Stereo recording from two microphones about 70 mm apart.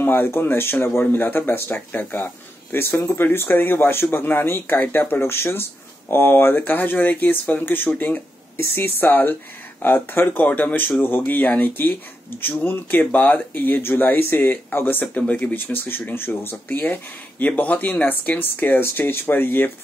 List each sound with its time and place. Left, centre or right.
0.0 s speech: left
8.5 s speech: left